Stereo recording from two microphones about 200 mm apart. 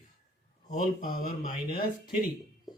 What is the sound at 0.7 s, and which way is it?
Speech, 45° left (ahead or behind).